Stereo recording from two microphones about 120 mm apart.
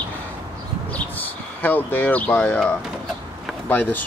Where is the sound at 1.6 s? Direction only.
15° left (ahead or behind).